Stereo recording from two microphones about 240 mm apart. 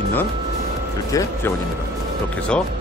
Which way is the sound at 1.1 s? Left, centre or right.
Centre.